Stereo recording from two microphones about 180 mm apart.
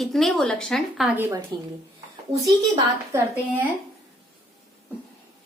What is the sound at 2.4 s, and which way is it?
Speech, 20° right (ahead or behind).